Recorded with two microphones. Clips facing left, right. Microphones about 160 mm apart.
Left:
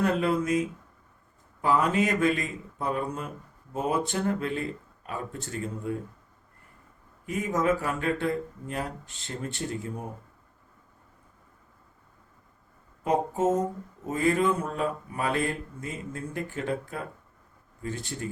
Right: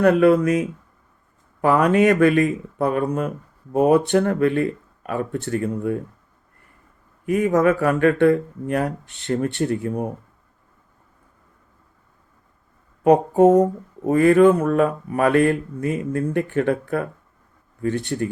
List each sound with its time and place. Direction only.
0.0 s speech: 65° right (ahead or behind)
7.3 s speech: 65° right (ahead or behind)
13.1 s speech: 65° right (ahead or behind)